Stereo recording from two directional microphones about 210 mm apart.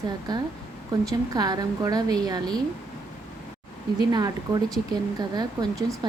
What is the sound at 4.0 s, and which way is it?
A woman's voice, 20° right (ahead or behind).